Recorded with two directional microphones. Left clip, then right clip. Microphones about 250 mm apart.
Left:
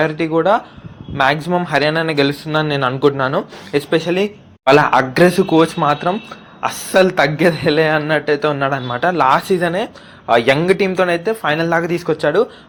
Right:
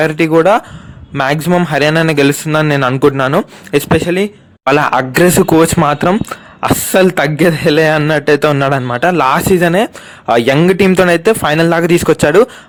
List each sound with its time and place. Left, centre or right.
0.0 s a man's voice: right
4.7 s speech: right
8.0 s speech: right